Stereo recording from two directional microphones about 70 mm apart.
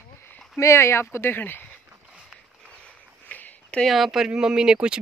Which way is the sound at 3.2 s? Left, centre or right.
Left.